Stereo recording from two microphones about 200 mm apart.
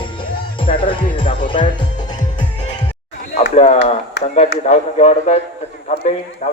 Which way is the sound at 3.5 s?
35° left (ahead or behind).